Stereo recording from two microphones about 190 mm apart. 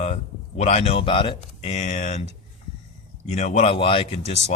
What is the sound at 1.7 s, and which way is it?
Speech, 40° left (ahead or behind).